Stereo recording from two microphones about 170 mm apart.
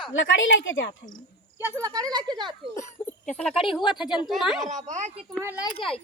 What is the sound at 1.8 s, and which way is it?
Speech, 25° right (ahead or behind).